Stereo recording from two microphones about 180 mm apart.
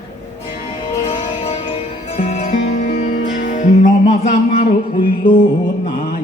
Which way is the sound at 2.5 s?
55° left (ahead or behind).